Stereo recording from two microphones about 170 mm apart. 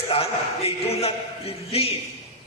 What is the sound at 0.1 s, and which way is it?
A man's voice, 35° left (ahead or behind).